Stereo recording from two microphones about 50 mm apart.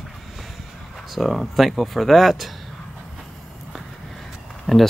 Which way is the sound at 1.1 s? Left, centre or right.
Centre.